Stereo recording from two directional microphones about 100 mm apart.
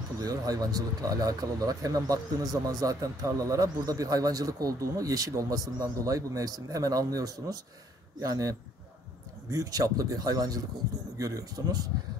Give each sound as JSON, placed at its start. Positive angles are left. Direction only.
{"t": 0.2, "sound": "speech", "side_deg": -40}